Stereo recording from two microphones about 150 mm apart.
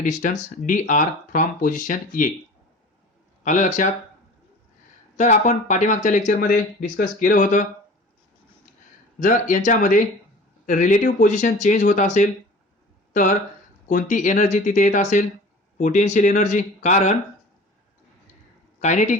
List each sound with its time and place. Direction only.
0.0 s speech: 65° left (ahead or behind)
3.4 s speech: 55° left (ahead or behind)
5.1 s speech: 50° left (ahead or behind)
6.4 s speech: 70° left (ahead or behind)
9.1 s speech: 60° left (ahead or behind)
18.8 s speech: 55° left (ahead or behind)